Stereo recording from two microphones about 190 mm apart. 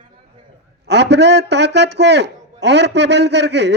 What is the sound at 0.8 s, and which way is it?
A man's voice, 65° right (ahead or behind).